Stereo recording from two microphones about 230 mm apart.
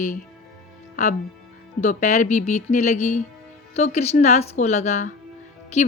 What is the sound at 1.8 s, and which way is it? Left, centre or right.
A woman's voice, left.